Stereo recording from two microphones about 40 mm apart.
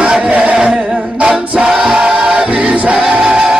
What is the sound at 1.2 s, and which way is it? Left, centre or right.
A capella, right.